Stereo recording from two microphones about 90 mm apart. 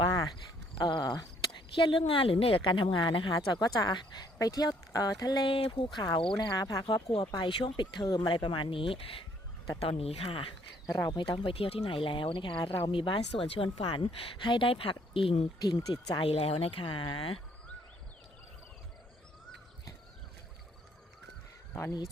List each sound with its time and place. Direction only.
0.1 s a sound: 50° left (ahead or behind)
1.7 s speech: 70° left (ahead or behind)
3.5 s speech: 45° left (ahead or behind)
5.5 s speech: 80° left
6.0 s speech: 55° left (ahead or behind)
6.3 s speech: 45° left (ahead or behind)
6.8 s speech: 65° left (ahead or behind); by 10.5 s 85° left
10.8 s speech: 35° left (ahead or behind)
11.1 s speech: 60° left (ahead or behind); by 17.4 s 85° left